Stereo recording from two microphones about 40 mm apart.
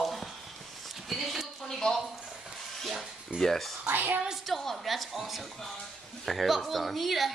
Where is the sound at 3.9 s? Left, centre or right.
Right.